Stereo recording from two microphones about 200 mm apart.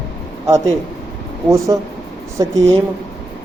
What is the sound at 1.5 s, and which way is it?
Speech, 15° right (ahead or behind).